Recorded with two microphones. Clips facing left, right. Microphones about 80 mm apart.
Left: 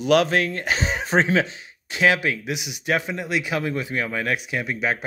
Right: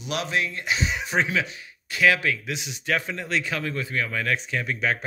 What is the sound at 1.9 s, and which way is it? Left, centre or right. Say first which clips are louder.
Speech: left 1 dB; left.